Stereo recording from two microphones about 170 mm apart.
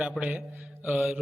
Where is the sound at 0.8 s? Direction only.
5° right (ahead or behind).